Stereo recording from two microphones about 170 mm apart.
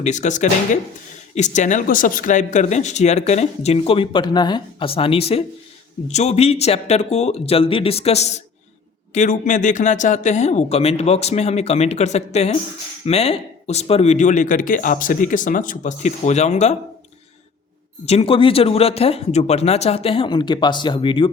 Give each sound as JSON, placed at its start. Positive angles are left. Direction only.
{"t": 0.0, "sound": "speech", "side_deg": 45}
{"t": 18.0, "sound": "speech", "side_deg": 35}